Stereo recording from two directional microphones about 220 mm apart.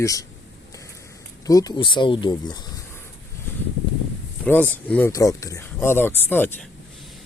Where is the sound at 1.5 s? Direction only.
15° left (ahead or behind).